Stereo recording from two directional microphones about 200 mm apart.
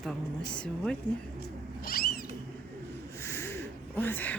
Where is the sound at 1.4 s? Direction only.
50° left (ahead or behind).